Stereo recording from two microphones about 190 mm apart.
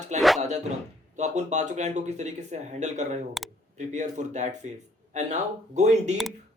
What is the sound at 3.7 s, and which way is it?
Speech, 40° right (ahead or behind).